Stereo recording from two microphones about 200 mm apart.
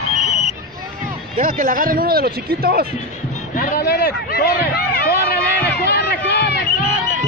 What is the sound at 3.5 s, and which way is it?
Speech, 50° left (ahead or behind).